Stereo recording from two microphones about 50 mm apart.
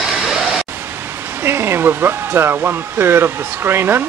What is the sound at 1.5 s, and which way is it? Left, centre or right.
Speech, right.